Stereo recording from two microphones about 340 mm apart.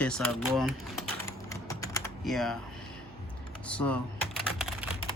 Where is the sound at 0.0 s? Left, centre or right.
Centre.